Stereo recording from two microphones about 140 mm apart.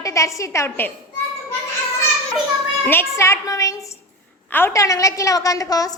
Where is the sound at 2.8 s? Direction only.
20° left (ahead or behind).